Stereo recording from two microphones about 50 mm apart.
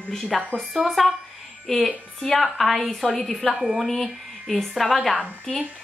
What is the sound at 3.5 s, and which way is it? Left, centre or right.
A woman's voice, centre.